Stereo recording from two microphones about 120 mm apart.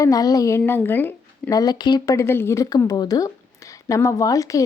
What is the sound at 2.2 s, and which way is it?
Speech, 20° left (ahead or behind).